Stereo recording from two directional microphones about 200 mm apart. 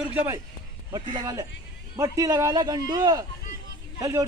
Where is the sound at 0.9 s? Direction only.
20° right (ahead or behind).